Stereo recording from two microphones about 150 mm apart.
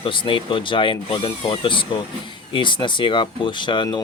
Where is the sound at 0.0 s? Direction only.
35° left (ahead or behind).